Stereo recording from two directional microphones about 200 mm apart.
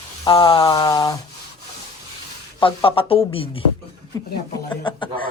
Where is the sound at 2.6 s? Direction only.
25° left (ahead or behind).